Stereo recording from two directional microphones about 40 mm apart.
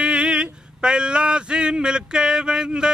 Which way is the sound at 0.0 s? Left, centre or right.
Right.